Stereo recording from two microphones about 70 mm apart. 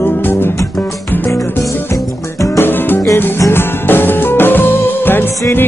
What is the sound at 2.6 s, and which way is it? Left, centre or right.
Music, left.